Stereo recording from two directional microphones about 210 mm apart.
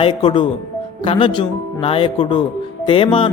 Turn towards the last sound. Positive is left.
turn(degrees=25)  # may be behind; listen again after turning